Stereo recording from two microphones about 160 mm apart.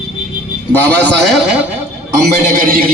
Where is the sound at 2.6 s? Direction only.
60° right (ahead or behind).